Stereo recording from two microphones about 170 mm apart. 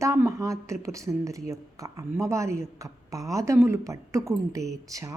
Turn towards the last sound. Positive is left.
turn(degrees=-20)  # may be behind; listen again after turning